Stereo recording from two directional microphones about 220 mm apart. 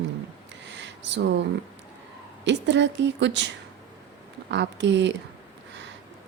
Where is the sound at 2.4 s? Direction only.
55° right (ahead or behind).